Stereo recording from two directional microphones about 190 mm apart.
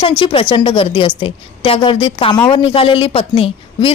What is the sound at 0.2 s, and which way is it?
A woman's voice, 25° left (ahead or behind).